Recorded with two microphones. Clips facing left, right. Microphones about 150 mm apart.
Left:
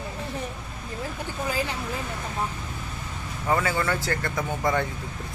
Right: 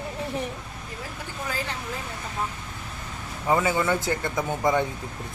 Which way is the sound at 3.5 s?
15° right (ahead or behind).